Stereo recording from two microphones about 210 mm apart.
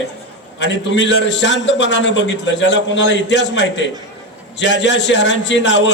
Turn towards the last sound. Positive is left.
turn(degrees=60)  # may be behind; listen again after turning